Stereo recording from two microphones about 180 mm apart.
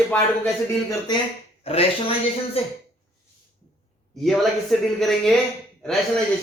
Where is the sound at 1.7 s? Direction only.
35° left (ahead or behind).